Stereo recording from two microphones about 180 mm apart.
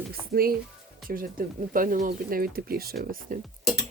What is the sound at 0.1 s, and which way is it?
Speech, 55° right (ahead or behind).